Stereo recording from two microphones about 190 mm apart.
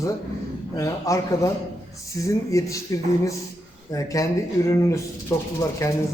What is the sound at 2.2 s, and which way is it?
A man's voice, 15° left (ahead or behind).